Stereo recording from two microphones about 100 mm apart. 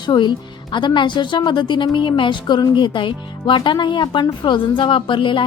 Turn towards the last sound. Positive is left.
turn(degrees=55)  # may be behind; listen again after turning